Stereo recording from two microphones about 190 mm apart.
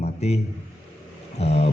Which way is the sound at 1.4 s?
35° left (ahead or behind).